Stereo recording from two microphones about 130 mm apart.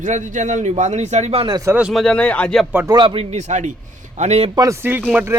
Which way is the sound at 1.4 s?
30° right (ahead or behind).